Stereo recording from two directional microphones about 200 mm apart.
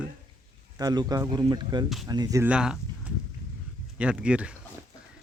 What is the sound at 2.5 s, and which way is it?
Speech, 5° right (ahead or behind).